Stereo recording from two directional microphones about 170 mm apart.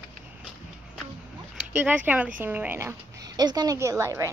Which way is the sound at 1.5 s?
10° right (ahead or behind).